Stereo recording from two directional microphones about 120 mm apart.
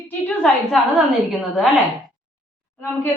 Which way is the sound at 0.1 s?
10° left (ahead or behind).